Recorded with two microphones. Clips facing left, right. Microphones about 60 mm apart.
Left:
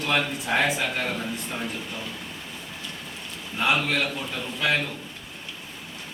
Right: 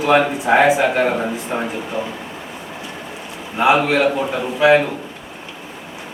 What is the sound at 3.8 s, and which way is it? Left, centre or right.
Speech, centre.